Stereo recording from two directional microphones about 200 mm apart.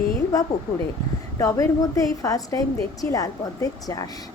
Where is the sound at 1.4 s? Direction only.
15° left (ahead or behind).